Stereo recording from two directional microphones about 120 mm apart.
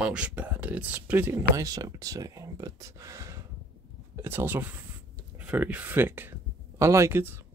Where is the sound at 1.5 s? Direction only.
30° right (ahead or behind).